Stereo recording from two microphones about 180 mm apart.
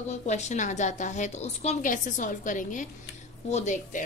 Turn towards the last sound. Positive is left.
turn(degrees=40)  # may be behind; listen again after turning